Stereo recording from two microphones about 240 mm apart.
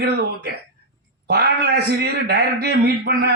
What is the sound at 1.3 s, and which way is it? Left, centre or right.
Speech, right.